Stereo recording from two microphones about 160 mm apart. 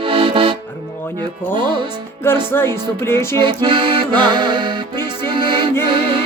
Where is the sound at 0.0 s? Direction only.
35° right (ahead or behind).